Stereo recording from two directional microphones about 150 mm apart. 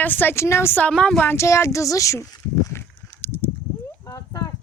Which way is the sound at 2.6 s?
15° left (ahead or behind).